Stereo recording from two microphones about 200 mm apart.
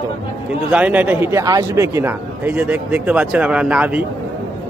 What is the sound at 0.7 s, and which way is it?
A man's voice, 5° right (ahead or behind).